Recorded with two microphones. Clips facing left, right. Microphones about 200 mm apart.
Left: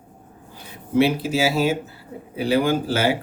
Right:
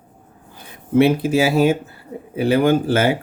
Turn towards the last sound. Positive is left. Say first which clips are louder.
# right 4 dB
turn(degrees=-55)  # may be behind; listen again after turning